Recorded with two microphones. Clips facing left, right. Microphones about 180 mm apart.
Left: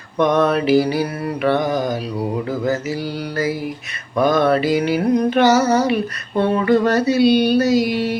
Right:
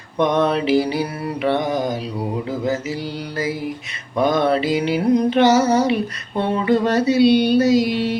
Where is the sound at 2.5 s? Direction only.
10° right (ahead or behind).